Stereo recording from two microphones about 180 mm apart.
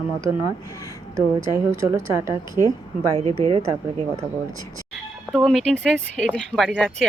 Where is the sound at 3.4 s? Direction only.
30° right (ahead or behind).